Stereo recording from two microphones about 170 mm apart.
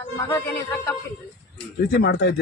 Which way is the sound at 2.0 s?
90° left.